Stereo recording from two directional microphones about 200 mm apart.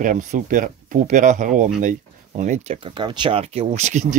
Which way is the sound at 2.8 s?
20° right (ahead or behind).